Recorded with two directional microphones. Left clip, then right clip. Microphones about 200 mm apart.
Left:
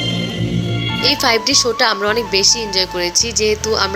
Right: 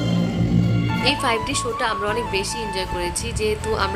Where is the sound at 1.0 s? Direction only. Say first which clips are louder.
Left 6 dB; 20° left (ahead or behind).